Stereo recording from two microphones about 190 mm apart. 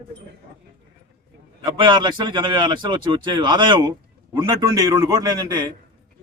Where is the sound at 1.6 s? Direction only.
25° right (ahead or behind).